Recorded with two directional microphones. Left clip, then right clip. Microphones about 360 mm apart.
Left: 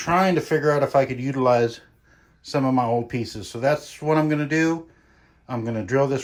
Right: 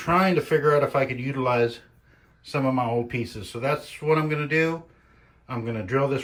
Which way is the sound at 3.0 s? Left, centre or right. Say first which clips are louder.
Left 1 dB; centre.